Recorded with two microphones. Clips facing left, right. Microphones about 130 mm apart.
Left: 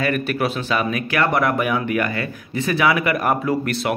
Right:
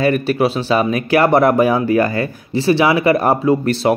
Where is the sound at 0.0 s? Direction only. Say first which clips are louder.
Right 6 dB; 30° right (ahead or behind).